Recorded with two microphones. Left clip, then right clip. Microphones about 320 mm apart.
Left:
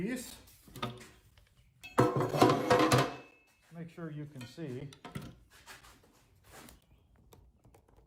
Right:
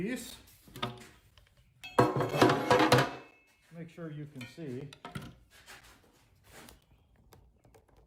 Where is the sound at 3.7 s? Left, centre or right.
Centre.